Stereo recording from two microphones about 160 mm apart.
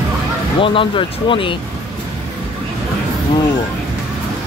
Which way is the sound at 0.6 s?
35° left (ahead or behind).